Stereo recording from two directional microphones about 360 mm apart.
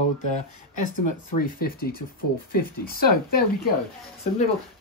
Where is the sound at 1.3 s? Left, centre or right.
Left.